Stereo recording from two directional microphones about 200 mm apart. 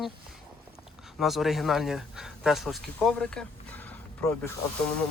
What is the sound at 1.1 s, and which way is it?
Speech, centre (ahead or behind).